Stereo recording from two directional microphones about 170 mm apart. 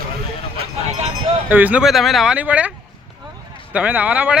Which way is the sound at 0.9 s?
40° right (ahead or behind).